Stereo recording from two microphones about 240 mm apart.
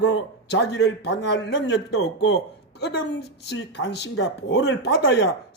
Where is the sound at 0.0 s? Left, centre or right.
Left.